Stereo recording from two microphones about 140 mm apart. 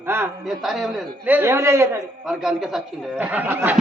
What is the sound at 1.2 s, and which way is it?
Speech, 15° right (ahead or behind).